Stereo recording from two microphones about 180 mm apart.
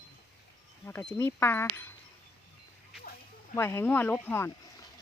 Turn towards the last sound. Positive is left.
turn(degrees=10)  # may be behind; listen again after turning